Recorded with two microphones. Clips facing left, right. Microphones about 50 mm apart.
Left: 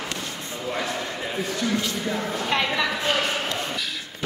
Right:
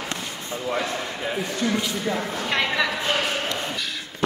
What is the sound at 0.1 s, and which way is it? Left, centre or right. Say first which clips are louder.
Basketball bounce: right 1 dB; right.